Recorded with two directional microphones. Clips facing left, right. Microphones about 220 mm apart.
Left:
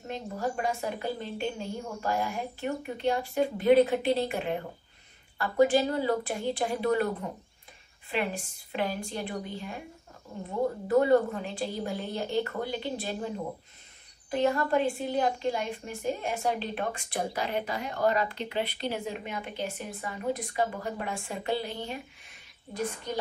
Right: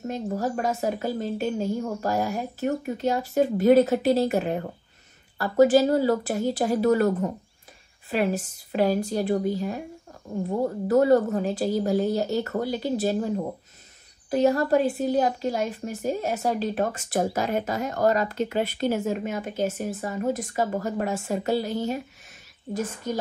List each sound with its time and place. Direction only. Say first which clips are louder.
0.1 s a woman's voice: right 4 dB; 40° right (ahead or behind)
14.3 s a woman's voice: right 5 dB; 40° right (ahead or behind)